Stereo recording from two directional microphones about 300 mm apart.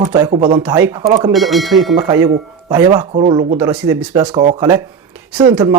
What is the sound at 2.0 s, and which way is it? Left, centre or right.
Speech, centre.